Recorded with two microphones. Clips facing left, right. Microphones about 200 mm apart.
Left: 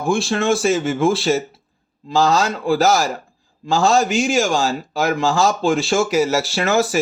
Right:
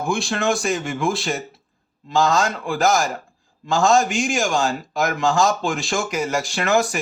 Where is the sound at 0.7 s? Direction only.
35° left (ahead or behind).